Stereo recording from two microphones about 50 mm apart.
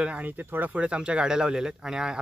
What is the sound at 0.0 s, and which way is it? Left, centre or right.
Speech, right.